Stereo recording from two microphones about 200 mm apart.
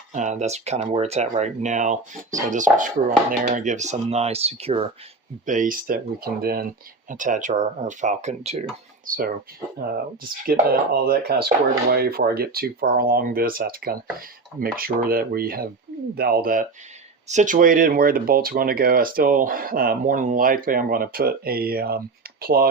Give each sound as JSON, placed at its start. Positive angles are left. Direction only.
{"t": 0.1, "sound": "speech", "side_deg": -35}
{"t": 5.5, "sound": "speech", "side_deg": -40}
{"t": 9.0, "sound": "speech", "side_deg": -45}